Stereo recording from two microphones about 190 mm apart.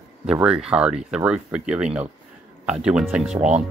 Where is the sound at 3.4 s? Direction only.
40° right (ahead or behind).